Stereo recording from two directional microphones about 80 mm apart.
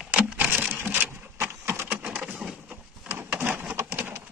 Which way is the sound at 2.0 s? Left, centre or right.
Centre.